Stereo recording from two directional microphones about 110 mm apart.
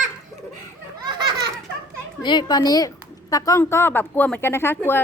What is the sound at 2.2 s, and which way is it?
A child's voice, 45° left (ahead or behind).